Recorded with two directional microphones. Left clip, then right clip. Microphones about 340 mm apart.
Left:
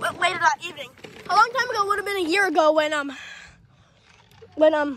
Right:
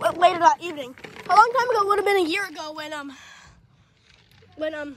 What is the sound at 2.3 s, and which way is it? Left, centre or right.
Speech, centre.